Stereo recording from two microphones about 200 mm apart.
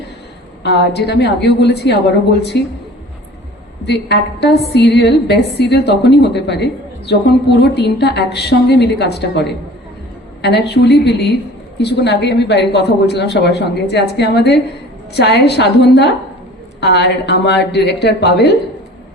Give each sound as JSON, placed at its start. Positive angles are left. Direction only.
{"t": 0.6, "sound": "a woman's voice", "side_deg": 55}
{"t": 3.8, "sound": "a woman's voice", "side_deg": 55}